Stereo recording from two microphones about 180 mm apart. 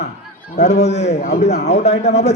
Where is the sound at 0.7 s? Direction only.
40° left (ahead or behind).